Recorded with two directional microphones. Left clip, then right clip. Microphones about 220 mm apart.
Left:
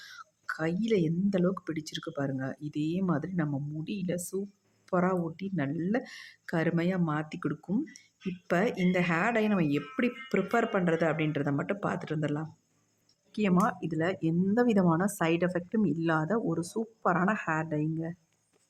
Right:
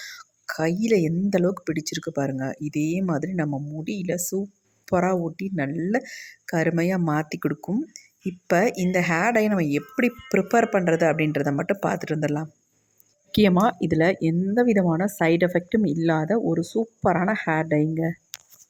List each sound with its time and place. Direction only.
0.0 s speech: 20° right (ahead or behind)